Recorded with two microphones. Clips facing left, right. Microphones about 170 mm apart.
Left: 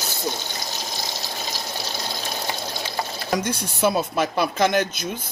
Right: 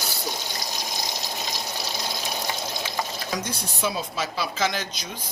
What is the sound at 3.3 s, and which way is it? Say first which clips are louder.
Speech: left 6 dB; 55° left (ahead or behind).